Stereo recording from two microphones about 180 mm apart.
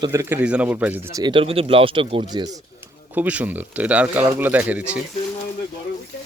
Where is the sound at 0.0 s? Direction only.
15° right (ahead or behind).